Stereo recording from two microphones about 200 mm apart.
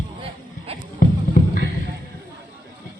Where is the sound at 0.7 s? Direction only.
30° right (ahead or behind).